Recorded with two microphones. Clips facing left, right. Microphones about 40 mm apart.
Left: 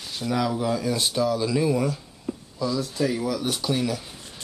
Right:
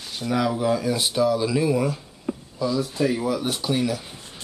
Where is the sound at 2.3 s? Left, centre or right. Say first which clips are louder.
Right 3 dB; right.